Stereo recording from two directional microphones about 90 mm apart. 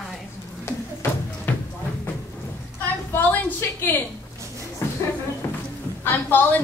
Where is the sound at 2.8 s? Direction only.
20° left (ahead or behind).